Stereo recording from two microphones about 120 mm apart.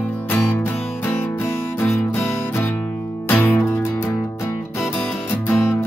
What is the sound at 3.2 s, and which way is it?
Music, 15° left (ahead or behind).